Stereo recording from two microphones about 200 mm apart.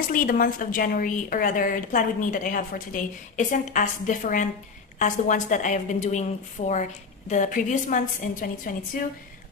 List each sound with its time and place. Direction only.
0.1 s a woman's voice: 45° left (ahead or behind)